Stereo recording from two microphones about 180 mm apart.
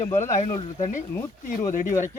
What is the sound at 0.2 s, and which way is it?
Speech, 40° left (ahead or behind).